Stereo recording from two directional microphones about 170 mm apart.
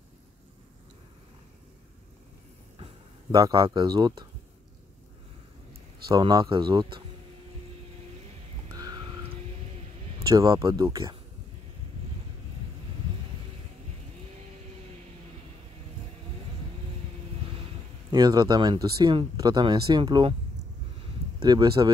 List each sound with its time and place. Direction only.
2.8 s a man's voice: 25° right (ahead or behind)
6.0 s speech: 25° right (ahead or behind)
8.7 s vehicle: 25° right (ahead or behind)
10.3 s speech: 20° right (ahead or behind)
18.1 s speech: 25° right (ahead or behind)
21.4 s speech: 30° right (ahead or behind)